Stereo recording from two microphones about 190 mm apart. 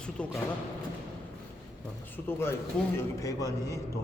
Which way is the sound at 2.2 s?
10° left (ahead or behind).